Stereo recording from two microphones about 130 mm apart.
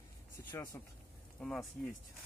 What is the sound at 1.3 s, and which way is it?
Speech, 5° left (ahead or behind).